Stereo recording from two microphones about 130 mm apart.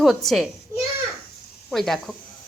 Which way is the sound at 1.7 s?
Centre (ahead or behind).